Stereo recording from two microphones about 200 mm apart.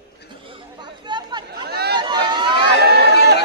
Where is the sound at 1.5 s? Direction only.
55° right (ahead or behind).